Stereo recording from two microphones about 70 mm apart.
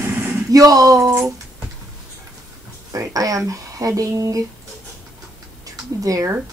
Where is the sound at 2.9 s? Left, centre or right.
Right.